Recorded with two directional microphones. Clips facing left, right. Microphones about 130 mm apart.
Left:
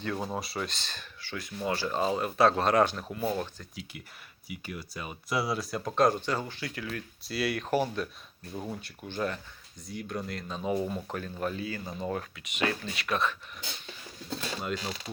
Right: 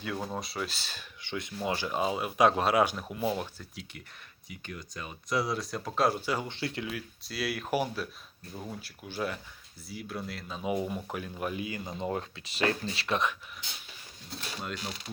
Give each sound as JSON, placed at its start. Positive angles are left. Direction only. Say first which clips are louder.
{"t": 0.0, "sound": "speech", "louder": "left 2 dB", "side_deg": -5}
{"t": 1.2, "sound": "speech", "louder": "even", "side_deg": -20}
{"t": 4.4, "sound": "speech", "louder": "left 3 dB", "side_deg": 5}
{"t": 6.5, "sound": "speech", "louder": "right 3 dB", "side_deg": -25}
{"t": 6.8, "sound": "speech", "louder": "even", "side_deg": -5}
{"t": 8.5, "sound": "speech", "louder": "left 3 dB", "side_deg": 10}
{"t": 8.8, "sound": "speech", "louder": "even", "side_deg": -5}